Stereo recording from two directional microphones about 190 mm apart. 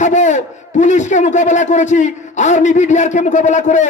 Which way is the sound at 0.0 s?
40° left (ahead or behind).